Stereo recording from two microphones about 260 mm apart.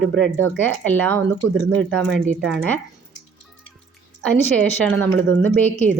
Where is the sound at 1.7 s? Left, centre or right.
Right.